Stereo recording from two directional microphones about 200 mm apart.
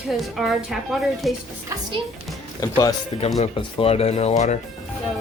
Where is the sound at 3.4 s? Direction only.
30° left (ahead or behind).